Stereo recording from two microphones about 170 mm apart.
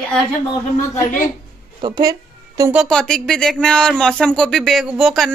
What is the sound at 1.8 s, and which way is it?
Speech, 25° right (ahead or behind).